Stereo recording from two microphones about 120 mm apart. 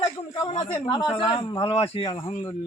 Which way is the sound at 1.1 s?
45° left (ahead or behind).